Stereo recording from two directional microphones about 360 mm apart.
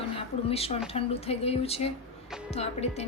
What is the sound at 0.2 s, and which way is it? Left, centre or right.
A woman's voice, centre.